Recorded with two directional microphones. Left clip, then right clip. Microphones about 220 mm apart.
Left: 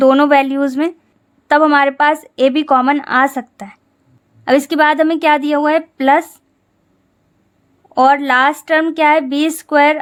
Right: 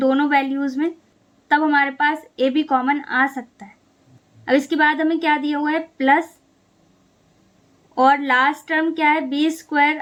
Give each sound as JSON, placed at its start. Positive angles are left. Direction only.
{"t": 0.0, "sound": "speech", "side_deg": 45}
{"t": 7.9, "sound": "speech", "side_deg": 45}